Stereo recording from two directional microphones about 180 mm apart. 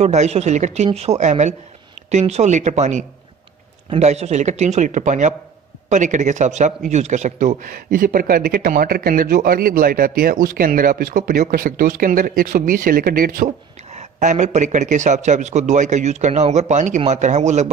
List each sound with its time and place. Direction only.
0.0 s a man's voice: 40° right (ahead or behind)
13.9 s speech: 40° right (ahead or behind)